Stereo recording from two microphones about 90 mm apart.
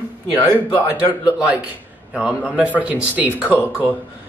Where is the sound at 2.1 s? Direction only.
10° right (ahead or behind).